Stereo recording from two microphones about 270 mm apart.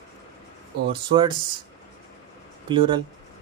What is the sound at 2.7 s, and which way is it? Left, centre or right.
Speech, centre.